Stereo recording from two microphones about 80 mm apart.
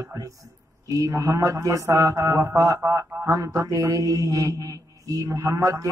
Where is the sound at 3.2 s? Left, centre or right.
Right.